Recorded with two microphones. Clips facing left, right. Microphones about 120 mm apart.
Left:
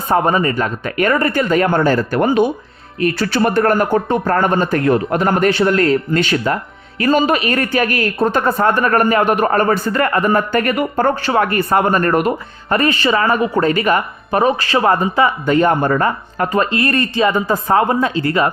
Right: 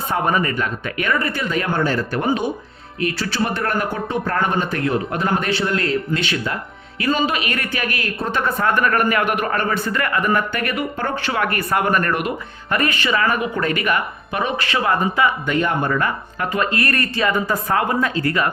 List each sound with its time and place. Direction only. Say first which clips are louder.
0.1 s speech: left 6 dB; 35° left (ahead or behind)